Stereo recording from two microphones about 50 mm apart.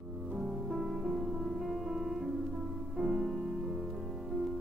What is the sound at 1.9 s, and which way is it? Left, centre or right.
Music, centre.